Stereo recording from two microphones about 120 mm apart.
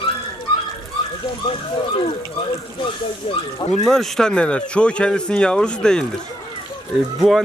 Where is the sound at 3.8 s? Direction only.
5° left (ahead or behind).